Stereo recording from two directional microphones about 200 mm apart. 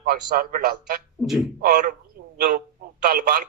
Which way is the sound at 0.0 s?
45° right (ahead or behind).